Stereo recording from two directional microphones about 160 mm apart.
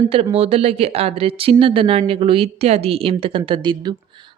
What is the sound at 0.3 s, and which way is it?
A woman's voice, 40° right (ahead or behind).